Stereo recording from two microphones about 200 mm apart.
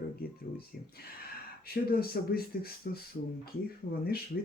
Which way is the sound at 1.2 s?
50° left (ahead or behind).